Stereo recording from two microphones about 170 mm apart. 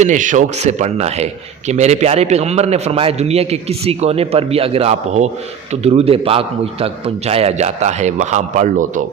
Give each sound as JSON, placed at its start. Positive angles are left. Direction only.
{"t": 0.0, "sound": "a man's voice", "side_deg": -45}